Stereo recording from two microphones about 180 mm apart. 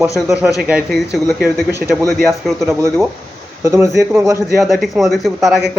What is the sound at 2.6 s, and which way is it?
Speech, 15° right (ahead or behind).